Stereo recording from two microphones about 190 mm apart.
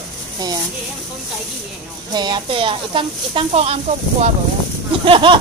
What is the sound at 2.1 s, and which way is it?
Speech, 25° right (ahead or behind).